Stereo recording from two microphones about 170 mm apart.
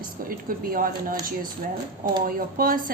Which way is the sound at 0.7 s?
55° right (ahead or behind).